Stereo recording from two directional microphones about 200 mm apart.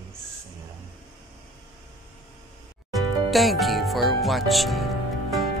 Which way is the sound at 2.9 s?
Centre (ahead or behind).